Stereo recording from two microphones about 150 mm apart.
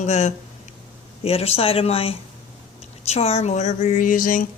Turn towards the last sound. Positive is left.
turn(degrees=65)  # may be behind; listen again after turning